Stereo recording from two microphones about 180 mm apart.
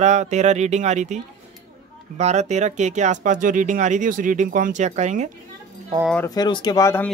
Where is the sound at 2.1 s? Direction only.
40° right (ahead or behind).